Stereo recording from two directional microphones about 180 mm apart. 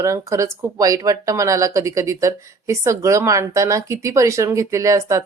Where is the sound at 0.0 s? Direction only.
15° right (ahead or behind).